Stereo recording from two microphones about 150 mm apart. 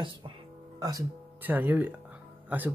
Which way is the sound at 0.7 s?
25° right (ahead or behind).